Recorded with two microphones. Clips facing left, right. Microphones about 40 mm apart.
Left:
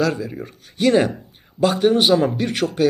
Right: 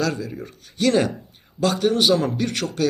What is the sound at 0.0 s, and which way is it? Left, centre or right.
A man's voice, centre.